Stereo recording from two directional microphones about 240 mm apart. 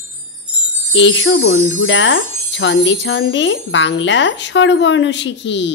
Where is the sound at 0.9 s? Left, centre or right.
Left.